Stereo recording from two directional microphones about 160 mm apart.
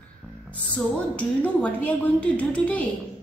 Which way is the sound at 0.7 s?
10° left (ahead or behind).